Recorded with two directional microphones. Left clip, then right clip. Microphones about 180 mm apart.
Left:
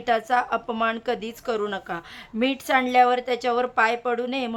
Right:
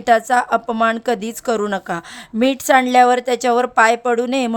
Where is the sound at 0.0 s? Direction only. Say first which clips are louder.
Right 8 dB; 35° right (ahead or behind).